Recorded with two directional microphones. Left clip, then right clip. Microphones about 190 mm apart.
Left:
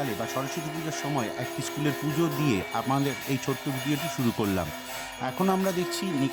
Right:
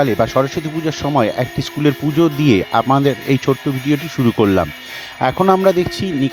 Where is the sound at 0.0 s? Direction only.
40° right (ahead or behind).